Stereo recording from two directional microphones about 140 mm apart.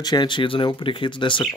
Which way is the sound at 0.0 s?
30° left (ahead or behind).